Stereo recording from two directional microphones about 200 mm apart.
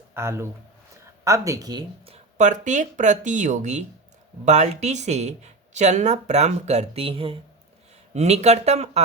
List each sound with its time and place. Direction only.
0.1 s speech: 15° right (ahead or behind)
2.4 s speech: 35° right (ahead or behind)